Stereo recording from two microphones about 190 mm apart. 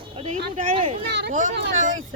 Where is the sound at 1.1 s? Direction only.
65° right (ahead or behind).